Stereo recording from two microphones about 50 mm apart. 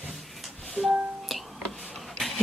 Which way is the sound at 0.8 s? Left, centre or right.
Centre.